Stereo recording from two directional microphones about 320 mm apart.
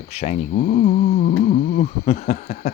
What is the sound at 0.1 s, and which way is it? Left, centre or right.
Speech, left.